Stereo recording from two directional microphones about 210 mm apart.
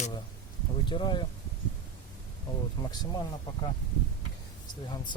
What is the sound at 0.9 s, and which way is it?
Speech, 20° left (ahead or behind).